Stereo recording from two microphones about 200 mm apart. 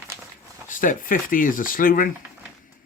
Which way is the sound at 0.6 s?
40° left (ahead or behind).